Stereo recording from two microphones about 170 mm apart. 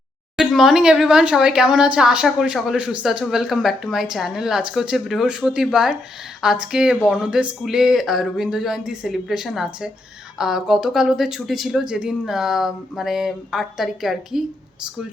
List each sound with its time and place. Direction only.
0.3 s speech: centre (ahead or behind)